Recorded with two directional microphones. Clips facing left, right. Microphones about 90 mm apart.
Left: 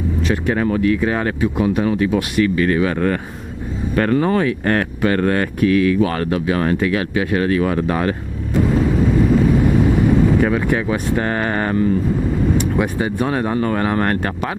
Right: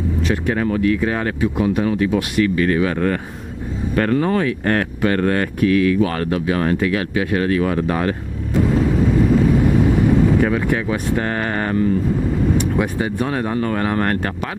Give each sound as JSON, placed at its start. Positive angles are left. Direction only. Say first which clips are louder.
{"t": 0.3, "sound": "speech", "louder": "left 2 dB", "side_deg": 20}
{"t": 8.6, "sound": "vehicle", "louder": "even", "side_deg": 25}
{"t": 12.7, "sound": "speech", "louder": "left 1 dB", "side_deg": 20}